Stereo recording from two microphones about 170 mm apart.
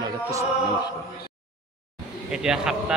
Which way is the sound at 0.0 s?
20° right (ahead or behind).